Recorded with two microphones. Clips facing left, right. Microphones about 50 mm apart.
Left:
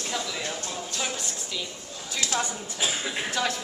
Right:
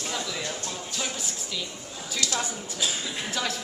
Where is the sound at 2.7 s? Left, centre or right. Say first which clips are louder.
Left 2 dB; left.